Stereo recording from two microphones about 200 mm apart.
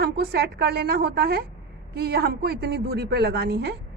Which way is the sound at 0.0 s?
50° right (ahead or behind).